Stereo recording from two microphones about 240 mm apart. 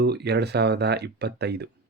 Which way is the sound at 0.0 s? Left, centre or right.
Right.